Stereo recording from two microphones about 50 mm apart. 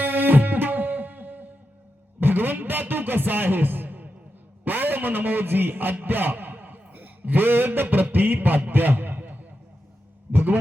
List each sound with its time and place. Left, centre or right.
0.0 s music: right
2.2 s a man's voice: right
10.3 s a sound: right